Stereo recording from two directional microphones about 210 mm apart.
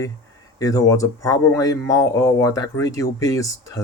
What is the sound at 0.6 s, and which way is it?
Speech, 15° left (ahead or behind).